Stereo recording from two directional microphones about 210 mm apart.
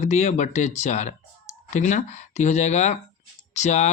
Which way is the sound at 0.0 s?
35° left (ahead or behind).